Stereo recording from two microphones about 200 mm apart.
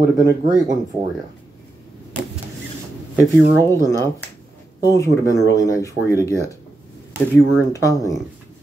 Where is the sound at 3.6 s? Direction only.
15° left (ahead or behind).